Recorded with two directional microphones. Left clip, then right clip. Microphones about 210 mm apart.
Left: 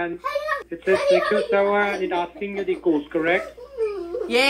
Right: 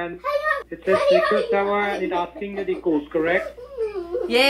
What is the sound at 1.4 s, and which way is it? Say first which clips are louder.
Speech: left 1 dB; 30° left (ahead or behind).